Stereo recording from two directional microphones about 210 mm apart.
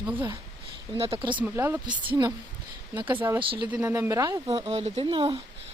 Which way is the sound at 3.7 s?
10° right (ahead or behind).